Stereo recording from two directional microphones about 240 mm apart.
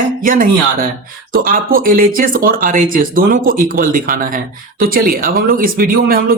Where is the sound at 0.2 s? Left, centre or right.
Right.